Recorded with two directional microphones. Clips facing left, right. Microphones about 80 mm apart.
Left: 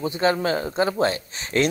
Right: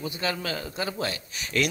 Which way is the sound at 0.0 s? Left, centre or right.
Left.